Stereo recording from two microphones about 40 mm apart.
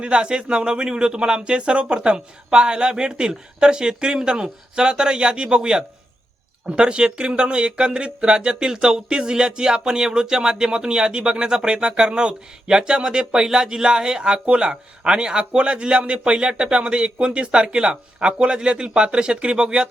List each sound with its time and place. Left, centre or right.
0.0 s speech: right